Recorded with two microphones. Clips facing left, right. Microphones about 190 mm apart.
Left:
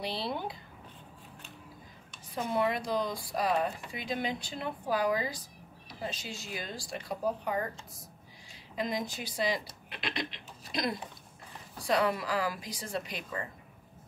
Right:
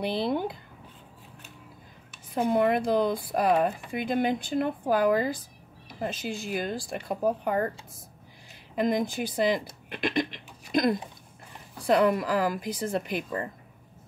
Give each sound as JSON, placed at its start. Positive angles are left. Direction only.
{"t": 0.0, "sound": "speech", "side_deg": -55}
{"t": 2.3, "sound": "speech", "side_deg": -55}
{"t": 8.7, "sound": "speech", "side_deg": -55}